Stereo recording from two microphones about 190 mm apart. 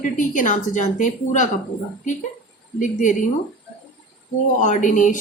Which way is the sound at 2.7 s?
40° left (ahead or behind).